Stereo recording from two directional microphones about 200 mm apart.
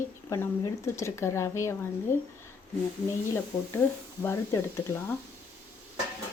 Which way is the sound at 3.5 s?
15° left (ahead or behind).